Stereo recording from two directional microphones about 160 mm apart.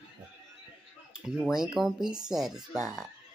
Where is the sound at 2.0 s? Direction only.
25° right (ahead or behind).